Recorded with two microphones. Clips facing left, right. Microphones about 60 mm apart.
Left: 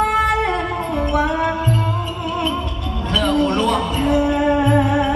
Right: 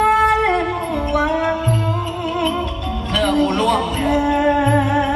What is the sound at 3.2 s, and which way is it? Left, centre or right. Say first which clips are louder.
Music: right 1 dB; right.